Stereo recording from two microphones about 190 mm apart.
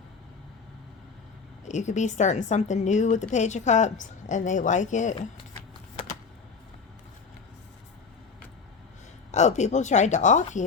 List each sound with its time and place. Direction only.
1.6 s a woman's voice: 40° left (ahead or behind)
9.3 s a woman's voice: 35° left (ahead or behind)